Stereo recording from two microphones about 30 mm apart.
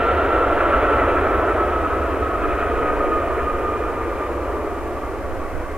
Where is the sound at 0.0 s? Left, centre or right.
Right.